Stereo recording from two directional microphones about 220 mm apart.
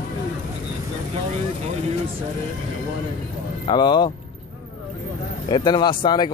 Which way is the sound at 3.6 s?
20° left (ahead or behind).